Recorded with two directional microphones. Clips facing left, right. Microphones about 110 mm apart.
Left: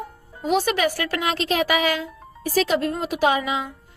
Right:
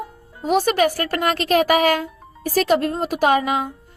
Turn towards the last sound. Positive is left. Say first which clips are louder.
# right 3 dB
turn(degrees=-50)  # may be behind; listen again after turning